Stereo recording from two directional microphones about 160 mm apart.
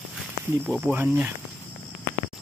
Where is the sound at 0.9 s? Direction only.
10° right (ahead or behind).